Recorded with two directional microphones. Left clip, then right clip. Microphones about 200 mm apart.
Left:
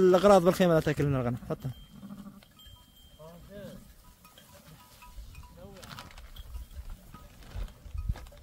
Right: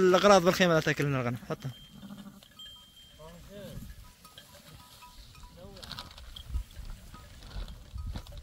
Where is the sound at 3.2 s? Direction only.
Centre (ahead or behind).